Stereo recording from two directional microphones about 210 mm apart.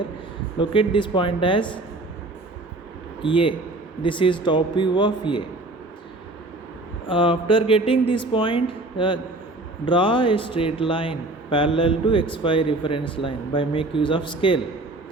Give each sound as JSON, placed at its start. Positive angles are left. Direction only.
{"t": 0.6, "sound": "a man's voice", "side_deg": 25}
{"t": 3.2, "sound": "a man's voice", "side_deg": 25}
{"t": 7.1, "sound": "a man's voice", "side_deg": 25}